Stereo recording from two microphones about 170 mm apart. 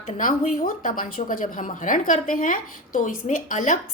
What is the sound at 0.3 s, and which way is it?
A woman's voice, 55° left (ahead or behind).